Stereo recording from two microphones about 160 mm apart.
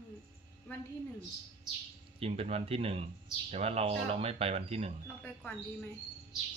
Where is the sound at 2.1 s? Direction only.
40° right (ahead or behind).